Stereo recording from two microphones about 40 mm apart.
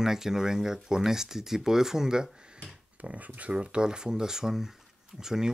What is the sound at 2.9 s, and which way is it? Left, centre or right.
Speech, right.